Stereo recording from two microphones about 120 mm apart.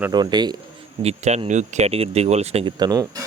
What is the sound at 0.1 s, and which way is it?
Speech, 35° right (ahead or behind).